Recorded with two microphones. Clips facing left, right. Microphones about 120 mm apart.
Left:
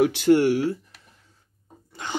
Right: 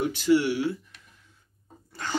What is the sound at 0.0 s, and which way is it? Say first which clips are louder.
Speech: left 5 dB; 70° left (ahead or behind).